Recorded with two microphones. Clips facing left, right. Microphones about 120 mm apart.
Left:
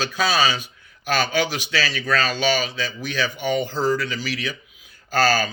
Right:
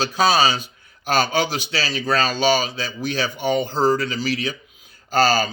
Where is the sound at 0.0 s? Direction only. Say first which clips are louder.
Right 4 dB; 40° right (ahead or behind).